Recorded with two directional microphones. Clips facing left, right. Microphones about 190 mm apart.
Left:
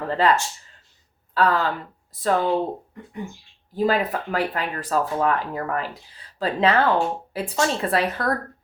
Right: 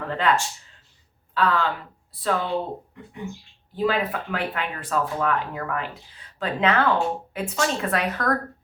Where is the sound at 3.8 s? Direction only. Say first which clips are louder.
Left 2 dB; 40° left (ahead or behind).